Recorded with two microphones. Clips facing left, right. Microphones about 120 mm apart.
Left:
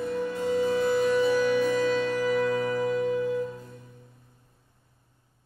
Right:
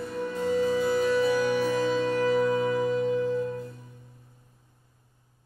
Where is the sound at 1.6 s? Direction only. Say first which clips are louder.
Left 1 dB; 15° right (ahead or behind).